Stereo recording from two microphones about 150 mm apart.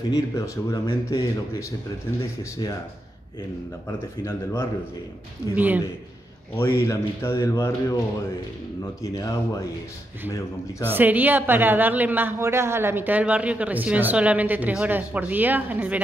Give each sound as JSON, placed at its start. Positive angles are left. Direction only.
{"t": 0.4, "sound": "speech", "side_deg": 20}
{"t": 4.2, "sound": "speech", "side_deg": 20}
{"t": 5.5, "sound": "a woman's voice", "side_deg": -10}
{"t": 6.5, "sound": "speech", "side_deg": 20}
{"t": 9.0, "sound": "speech", "side_deg": 25}
{"t": 10.8, "sound": "a woman's voice", "side_deg": -15}